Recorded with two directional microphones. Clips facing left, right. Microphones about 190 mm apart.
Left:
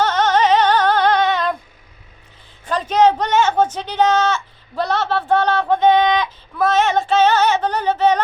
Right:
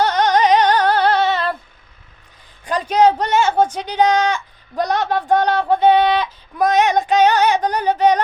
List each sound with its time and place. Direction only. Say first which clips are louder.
0.0 s music: right 1 dB; 10° right (ahead or behind)
2.6 s speech: even; 10° right (ahead or behind)